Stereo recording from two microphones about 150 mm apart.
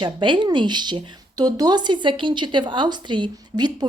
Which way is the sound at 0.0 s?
30° right (ahead or behind).